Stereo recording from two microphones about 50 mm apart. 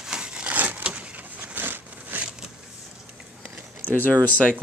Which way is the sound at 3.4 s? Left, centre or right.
Right.